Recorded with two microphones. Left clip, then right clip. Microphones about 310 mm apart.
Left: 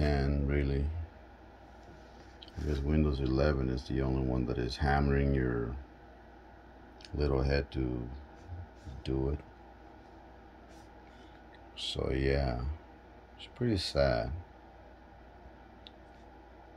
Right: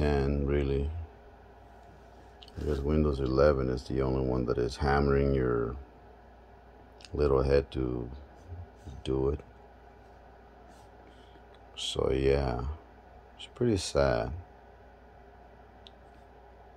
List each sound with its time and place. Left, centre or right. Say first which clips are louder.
0.0 s a sound: right 4 dB; centre
2.4 s speech: right 5 dB; centre
7.0 s speech: right 6 dB; centre
9.0 s speech: right 5 dB; centre
11.8 s speech: right 5 dB; centre